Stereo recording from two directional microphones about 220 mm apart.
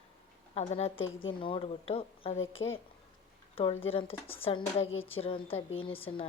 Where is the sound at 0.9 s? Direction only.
65° left (ahead or behind).